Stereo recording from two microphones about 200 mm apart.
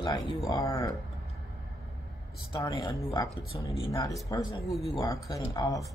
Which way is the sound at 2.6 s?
15° left (ahead or behind).